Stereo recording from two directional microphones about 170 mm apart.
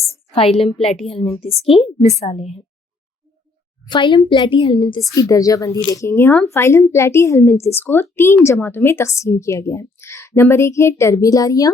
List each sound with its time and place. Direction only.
0.1 s a sound: 35° left (ahead or behind)
0.8 s speech: centre (ahead or behind)
1.2 s a woman's voice: 35° left (ahead or behind)
3.8 s a woman's voice: 25° left (ahead or behind)